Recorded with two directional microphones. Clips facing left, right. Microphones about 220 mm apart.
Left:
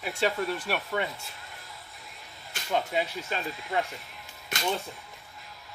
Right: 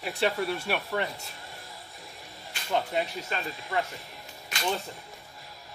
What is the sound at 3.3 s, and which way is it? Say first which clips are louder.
Speech: left 1 dB; 15° left (ahead or behind).